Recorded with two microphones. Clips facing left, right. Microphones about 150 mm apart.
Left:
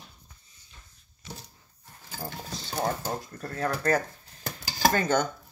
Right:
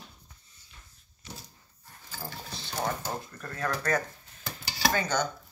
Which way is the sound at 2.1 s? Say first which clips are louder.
Left 3 dB; 40° left (ahead or behind).